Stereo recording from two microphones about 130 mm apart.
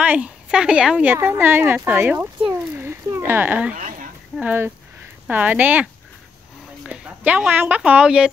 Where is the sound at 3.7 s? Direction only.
90° right.